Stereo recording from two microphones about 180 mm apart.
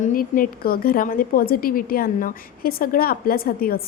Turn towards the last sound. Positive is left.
turn(degrees=55)  # may be behind; listen again after turning